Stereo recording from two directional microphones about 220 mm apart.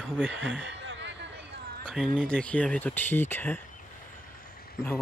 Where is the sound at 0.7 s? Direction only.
55° right (ahead or behind).